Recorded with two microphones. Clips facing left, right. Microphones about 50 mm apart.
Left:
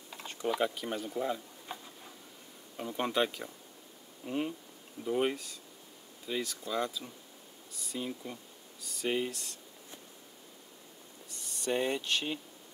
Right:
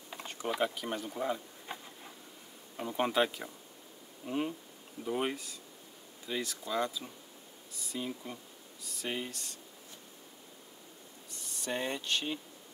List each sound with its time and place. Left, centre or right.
0.2 s a sound: centre
2.8 s speech: centre
11.2 s speech: centre